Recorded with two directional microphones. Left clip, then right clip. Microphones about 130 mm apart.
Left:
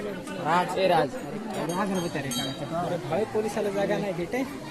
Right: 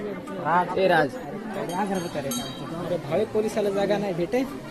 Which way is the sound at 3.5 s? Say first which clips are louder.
Right 3 dB; 5° left (ahead or behind).